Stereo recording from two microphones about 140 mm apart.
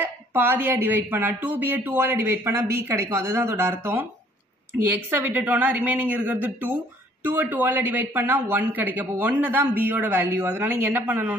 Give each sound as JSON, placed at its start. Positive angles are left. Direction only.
{"t": 0.0, "sound": "speech", "side_deg": -15}